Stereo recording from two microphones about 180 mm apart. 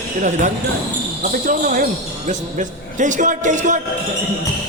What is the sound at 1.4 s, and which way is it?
A man's voice, 50° right (ahead or behind).